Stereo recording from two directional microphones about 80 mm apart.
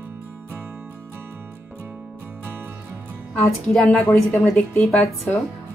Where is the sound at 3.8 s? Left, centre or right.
Centre.